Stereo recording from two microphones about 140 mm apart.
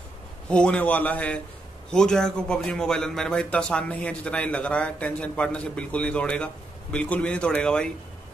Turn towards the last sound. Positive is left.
turn(degrees=5)  # may be behind; listen again after turning